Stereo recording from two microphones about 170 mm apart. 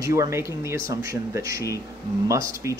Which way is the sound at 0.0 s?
20° right (ahead or behind).